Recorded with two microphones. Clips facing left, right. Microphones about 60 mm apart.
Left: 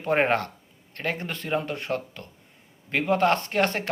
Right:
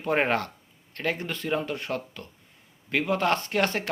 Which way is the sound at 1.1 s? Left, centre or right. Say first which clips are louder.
Even; left.